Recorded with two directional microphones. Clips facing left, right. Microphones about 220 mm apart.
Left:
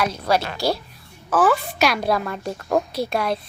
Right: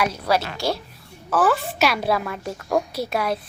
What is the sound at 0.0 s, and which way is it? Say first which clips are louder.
A woman's voice: left 1 dB; 5° right (ahead or behind).